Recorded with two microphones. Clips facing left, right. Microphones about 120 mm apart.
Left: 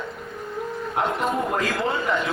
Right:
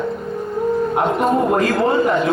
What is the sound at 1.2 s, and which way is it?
A man's voice, 50° right (ahead or behind).